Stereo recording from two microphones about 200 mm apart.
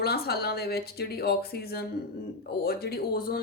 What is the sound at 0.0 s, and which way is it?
Speech, 50° left (ahead or behind).